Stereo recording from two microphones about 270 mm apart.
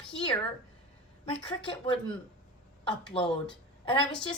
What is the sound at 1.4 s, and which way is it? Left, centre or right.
Speech, centre.